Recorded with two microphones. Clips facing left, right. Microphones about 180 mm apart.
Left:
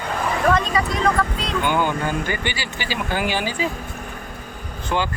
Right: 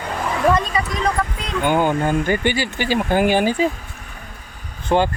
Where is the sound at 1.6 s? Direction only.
45° right (ahead or behind).